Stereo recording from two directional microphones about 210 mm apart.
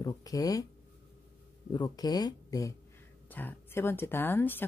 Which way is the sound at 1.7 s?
20° left (ahead or behind).